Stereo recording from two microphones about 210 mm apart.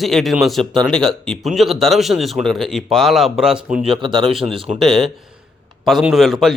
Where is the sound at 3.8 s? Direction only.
25° right (ahead or behind).